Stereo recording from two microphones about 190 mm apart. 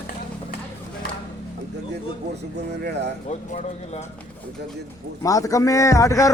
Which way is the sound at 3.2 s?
35° left (ahead or behind).